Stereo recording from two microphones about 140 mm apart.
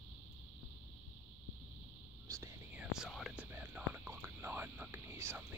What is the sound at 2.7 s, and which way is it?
Whispering, 5° right (ahead or behind).